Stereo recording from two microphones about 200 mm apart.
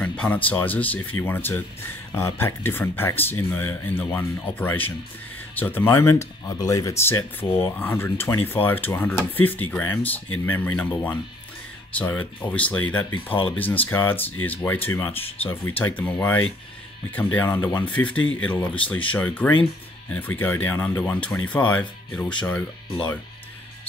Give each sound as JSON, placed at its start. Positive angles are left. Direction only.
{"t": 0.0, "sound": "speech", "side_deg": 5}
{"t": 13.3, "sound": "speech", "side_deg": 25}
{"t": 13.6, "sound": "speech", "side_deg": 10}
{"t": 15.1, "sound": "speech", "side_deg": 30}
{"t": 15.8, "sound": "speech", "side_deg": 10}
{"t": 18.2, "sound": "speech", "side_deg": 80}
{"t": 18.5, "sound": "speech", "side_deg": 5}